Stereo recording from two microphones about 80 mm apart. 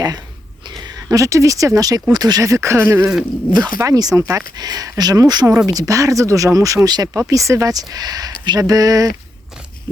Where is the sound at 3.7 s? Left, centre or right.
Right.